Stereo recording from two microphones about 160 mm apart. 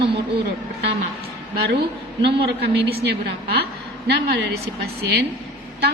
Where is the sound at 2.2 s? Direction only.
90° right.